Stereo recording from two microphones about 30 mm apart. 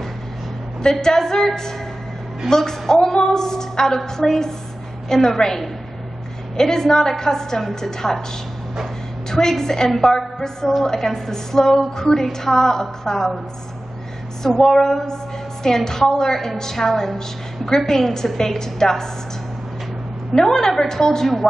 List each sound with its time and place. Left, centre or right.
1.0 s a woman's voice: centre
9.3 s a woman's voice: centre
14.6 s a woman's voice: centre
20.3 s a woman's voice: centre